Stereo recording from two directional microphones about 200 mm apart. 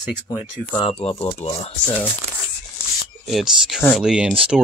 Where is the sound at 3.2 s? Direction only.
Centre (ahead or behind).